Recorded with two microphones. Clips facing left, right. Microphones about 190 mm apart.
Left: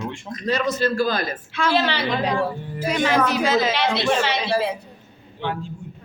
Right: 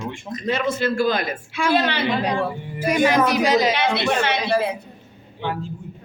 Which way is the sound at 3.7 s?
55° right (ahead or behind).